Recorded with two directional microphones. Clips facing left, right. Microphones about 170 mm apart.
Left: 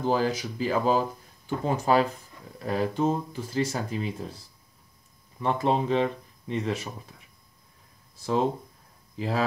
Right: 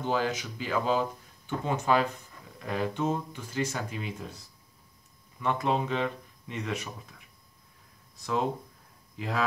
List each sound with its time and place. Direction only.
0.0 s speech: 35° left (ahead or behind)
8.2 s speech: 30° left (ahead or behind)